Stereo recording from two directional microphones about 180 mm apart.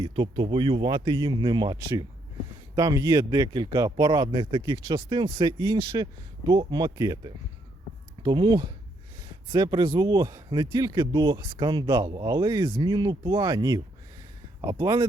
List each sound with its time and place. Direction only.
0.0 s speech: 25° right (ahead or behind)